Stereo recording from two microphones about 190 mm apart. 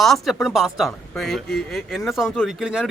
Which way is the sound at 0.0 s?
Centre (ahead or behind).